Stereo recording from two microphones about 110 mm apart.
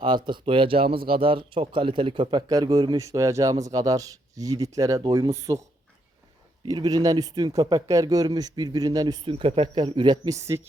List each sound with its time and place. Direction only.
0.0 s speech: 45° right (ahead or behind)
3.0 s speech: 30° right (ahead or behind)
6.7 s speech: 35° right (ahead or behind)
9.2 s speech: 55° right (ahead or behind)
10.2 s speech: 25° right (ahead or behind)